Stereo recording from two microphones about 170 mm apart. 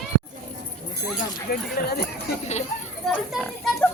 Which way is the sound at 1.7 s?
65° left (ahead or behind).